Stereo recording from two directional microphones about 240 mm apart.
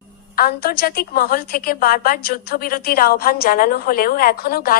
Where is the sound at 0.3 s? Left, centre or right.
Left.